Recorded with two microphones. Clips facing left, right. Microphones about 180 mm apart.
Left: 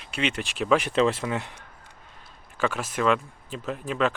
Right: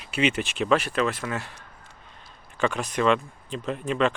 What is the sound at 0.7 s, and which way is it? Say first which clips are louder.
Speech: left 2 dB; 20° left (ahead or behind).